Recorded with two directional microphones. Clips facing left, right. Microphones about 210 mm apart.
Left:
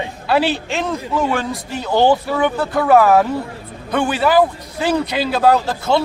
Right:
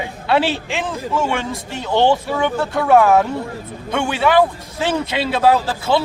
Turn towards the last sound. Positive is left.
turn(degrees=0)  # may be behind; listen again after turning